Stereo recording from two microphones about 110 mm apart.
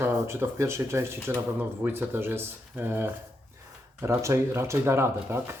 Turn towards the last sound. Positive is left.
turn(degrees=-25)  # may be behind; listen again after turning